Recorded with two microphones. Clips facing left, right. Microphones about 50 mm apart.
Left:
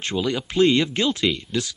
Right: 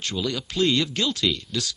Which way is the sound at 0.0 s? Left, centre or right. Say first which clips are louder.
Left 4 dB; left.